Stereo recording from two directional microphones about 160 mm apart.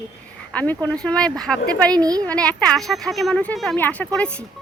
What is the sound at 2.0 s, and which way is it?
Speech, 25° right (ahead or behind).